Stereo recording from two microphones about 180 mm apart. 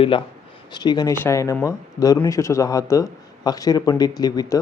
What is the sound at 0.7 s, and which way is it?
Speech, 25° left (ahead or behind).